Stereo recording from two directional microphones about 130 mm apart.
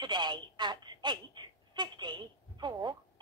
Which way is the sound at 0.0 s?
35° right (ahead or behind).